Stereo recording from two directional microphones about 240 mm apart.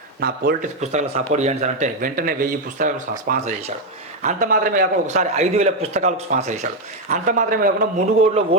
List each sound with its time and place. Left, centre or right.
0.2 s a man's voice: right